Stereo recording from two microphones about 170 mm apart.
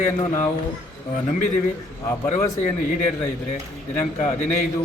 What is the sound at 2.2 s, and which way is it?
Speech, 45° left (ahead or behind).